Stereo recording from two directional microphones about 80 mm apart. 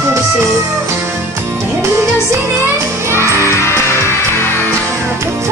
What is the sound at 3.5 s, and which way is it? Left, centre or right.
Music, left.